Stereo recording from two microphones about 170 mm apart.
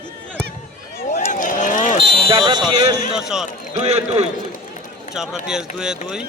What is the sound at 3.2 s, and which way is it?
Speech, 5° right (ahead or behind).